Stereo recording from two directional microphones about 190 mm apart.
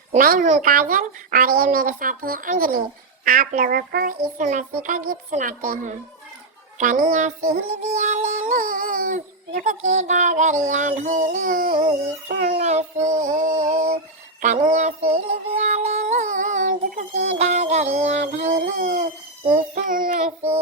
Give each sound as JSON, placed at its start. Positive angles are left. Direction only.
{"t": 0.2, "sound": "child singing", "side_deg": -45}
{"t": 12.5, "sound": "child singing", "side_deg": -35}